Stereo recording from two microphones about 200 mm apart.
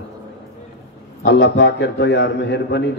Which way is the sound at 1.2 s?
60° left (ahead or behind).